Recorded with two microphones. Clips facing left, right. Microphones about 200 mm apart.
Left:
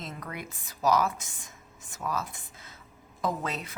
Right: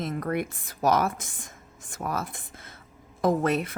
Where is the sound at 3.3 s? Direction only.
55° right (ahead or behind).